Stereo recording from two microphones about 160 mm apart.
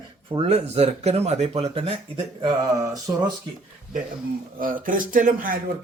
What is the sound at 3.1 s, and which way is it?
Speech, 15° right (ahead or behind).